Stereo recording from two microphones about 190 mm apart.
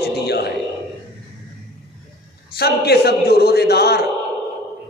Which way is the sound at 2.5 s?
55° left (ahead or behind).